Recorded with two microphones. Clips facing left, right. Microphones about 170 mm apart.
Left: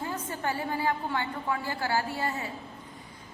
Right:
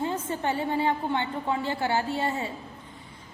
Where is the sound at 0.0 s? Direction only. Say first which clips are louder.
Right 4 dB; 25° right (ahead or behind).